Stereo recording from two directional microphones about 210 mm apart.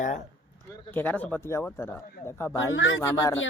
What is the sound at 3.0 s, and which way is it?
Speech, 15° left (ahead or behind).